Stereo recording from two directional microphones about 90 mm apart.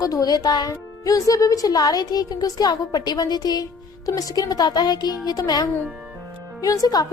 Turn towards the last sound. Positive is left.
turn(degrees=40)  # may be behind; listen again after turning